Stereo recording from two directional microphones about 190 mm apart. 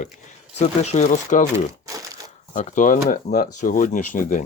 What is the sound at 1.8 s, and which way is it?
Crushing, 15° right (ahead or behind).